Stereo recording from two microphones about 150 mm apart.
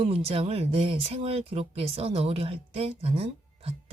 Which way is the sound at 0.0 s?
40° right (ahead or behind).